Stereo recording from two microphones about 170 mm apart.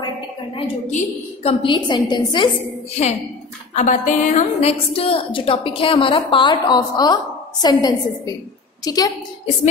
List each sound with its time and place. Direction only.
0.6 s a woman's voice: 40° left (ahead or behind)
3.7 s a woman's voice: 45° left (ahead or behind); by 9.1 s 20° left (ahead or behind)